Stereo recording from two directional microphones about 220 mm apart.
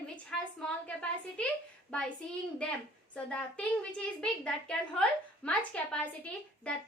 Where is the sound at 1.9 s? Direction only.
5° left (ahead or behind).